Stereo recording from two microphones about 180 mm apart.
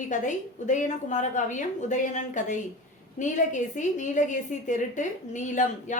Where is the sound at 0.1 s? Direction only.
45° left (ahead or behind).